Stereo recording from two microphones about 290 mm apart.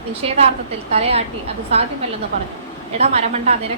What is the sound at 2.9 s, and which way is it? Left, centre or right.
Speech, right.